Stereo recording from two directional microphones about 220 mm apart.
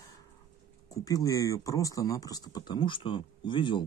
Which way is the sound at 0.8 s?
15° left (ahead or behind).